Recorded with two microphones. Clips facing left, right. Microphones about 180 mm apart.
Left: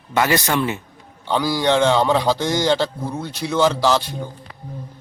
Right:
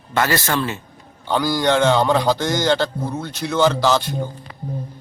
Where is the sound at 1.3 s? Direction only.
Centre (ahead or behind).